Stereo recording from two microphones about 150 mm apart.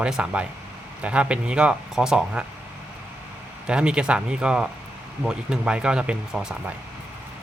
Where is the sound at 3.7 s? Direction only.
5° right (ahead or behind).